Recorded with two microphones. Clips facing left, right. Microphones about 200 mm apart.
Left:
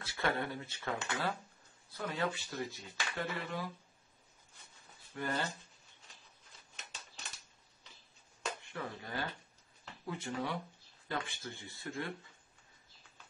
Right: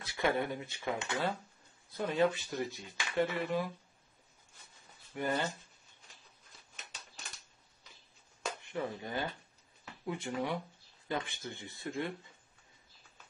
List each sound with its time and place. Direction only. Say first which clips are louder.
0.0 s speech: right 3 dB; 15° right (ahead or behind)
5.1 s speech: right 3 dB; 20° right (ahead or behind)
8.7 s speech: right 7 dB; 20° right (ahead or behind)